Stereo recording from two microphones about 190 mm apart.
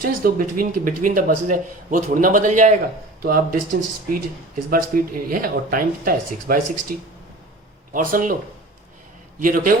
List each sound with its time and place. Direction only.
0.0 s speech: 50° right (ahead or behind)
9.4 s speech: 45° right (ahead or behind)